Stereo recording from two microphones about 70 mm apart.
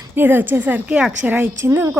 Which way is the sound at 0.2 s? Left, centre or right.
Right.